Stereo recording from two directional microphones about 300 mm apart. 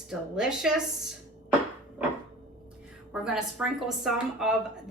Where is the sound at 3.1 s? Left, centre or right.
Centre.